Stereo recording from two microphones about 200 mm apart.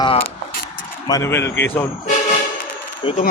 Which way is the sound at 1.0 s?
15° left (ahead or behind).